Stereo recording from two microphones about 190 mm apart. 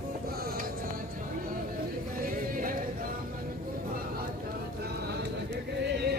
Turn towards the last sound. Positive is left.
turn(degrees=-60)  # may be behind; listen again after turning